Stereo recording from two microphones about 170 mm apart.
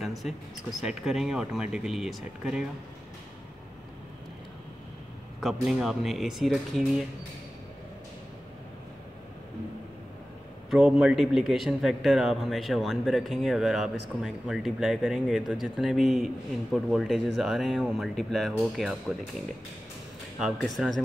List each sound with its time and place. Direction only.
0.0 s a man's voice: centre (ahead or behind)
5.4 s a man's voice: centre (ahead or behind)
10.7 s a man's voice: 5° right (ahead or behind)
20.3 s a man's voice: centre (ahead or behind)